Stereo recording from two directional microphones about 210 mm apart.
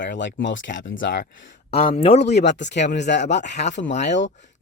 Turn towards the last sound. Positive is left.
turn(degrees=35)  # may be behind; listen again after turning